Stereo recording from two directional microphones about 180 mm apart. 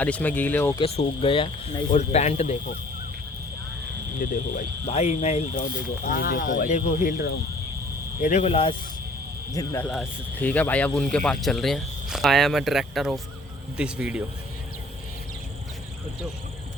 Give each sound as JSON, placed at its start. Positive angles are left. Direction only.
{"t": 0.0, "sound": "speech", "side_deg": 10}
{"t": 0.8, "sound": "speech", "side_deg": 30}
{"t": 4.2, "sound": "speech", "side_deg": 45}
{"t": 6.1, "sound": "speech", "side_deg": 55}
{"t": 8.2, "sound": "speech", "side_deg": 40}
{"t": 9.5, "sound": "speech", "side_deg": 20}
{"t": 10.4, "sound": "speech", "side_deg": 10}